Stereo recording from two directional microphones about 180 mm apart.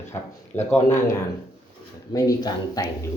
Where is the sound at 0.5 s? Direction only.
40° left (ahead or behind).